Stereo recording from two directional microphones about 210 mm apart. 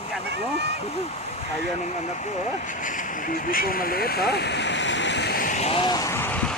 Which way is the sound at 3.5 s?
45° left (ahead or behind).